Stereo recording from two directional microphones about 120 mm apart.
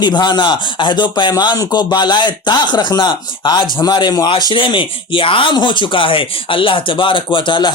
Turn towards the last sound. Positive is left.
turn(degrees=40)  # may be behind; listen again after turning